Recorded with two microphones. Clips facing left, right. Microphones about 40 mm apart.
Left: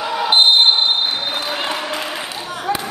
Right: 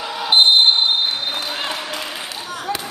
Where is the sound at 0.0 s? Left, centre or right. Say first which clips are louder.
Left 1 dB; centre.